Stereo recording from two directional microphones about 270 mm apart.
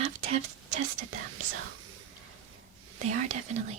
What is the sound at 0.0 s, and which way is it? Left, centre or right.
Whispering, right.